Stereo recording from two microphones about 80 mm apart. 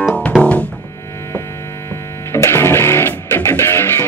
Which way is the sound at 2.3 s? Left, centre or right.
Left.